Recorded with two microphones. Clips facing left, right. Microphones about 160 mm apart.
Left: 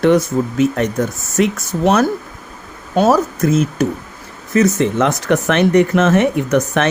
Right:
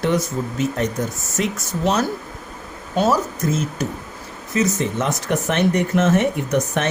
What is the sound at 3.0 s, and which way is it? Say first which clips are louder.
Speech: left 6 dB; 65° left (ahead or behind).